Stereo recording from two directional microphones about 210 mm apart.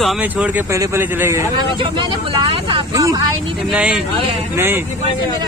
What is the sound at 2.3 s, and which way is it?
Speech, 25° right (ahead or behind).